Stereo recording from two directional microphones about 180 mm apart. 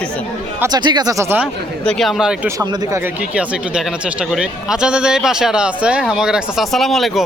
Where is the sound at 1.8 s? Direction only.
Centre (ahead or behind).